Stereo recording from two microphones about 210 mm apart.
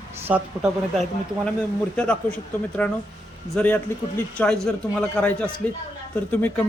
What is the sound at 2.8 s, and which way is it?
A man's voice, 5° left (ahead or behind).